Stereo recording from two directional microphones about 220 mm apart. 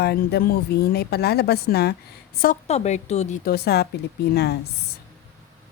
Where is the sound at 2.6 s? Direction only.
30° left (ahead or behind); by 4.6 s 45° left (ahead or behind).